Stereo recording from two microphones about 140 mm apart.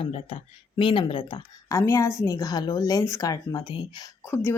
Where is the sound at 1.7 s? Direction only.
20° left (ahead or behind).